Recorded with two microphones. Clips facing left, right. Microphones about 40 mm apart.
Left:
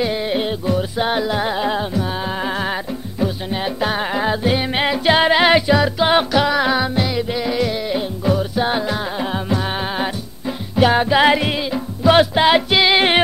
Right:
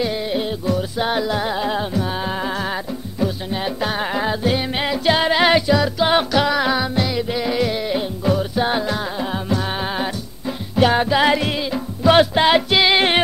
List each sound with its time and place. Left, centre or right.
0.0 s music: left
0.7 s music: centre
1.8 s music: centre
2.4 s music: left
6.3 s music: centre
11.1 s music: centre
11.7 s music: centre